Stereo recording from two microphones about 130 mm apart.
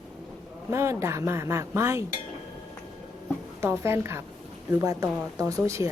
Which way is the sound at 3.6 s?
20° right (ahead or behind).